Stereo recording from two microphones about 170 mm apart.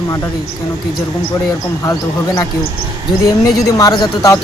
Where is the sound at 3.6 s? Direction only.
20° left (ahead or behind).